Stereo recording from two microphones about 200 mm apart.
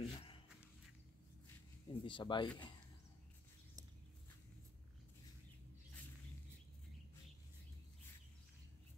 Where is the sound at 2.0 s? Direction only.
25° left (ahead or behind).